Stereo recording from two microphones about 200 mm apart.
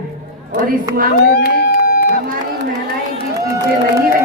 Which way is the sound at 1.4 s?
50° left (ahead or behind).